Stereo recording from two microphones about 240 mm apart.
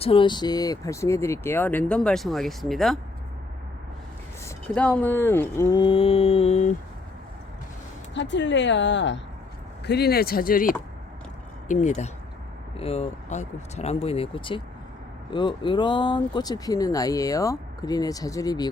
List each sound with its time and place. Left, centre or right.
0.0 s speech: left; by 3.0 s centre
4.4 s speech: centre; by 6.7 s left
8.1 s speech: left; by 18.7 s centre